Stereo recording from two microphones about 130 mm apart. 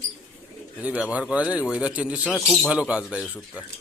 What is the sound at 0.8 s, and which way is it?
A man's voice, 10° right (ahead or behind).